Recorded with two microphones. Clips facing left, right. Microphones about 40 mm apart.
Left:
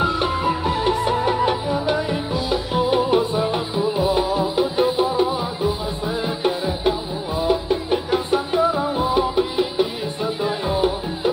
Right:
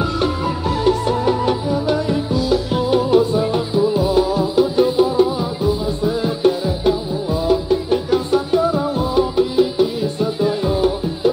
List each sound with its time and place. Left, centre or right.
0.0 s music: centre